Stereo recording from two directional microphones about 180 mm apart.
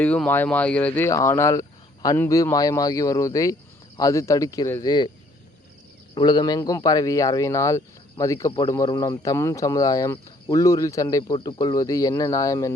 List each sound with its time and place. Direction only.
0.0 s speech: 10° left (ahead or behind); by 5.1 s 25° left (ahead or behind)
6.1 s speech: 25° left (ahead or behind)